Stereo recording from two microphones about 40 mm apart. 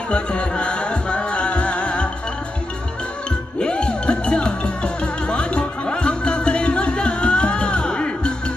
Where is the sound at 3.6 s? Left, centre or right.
Left.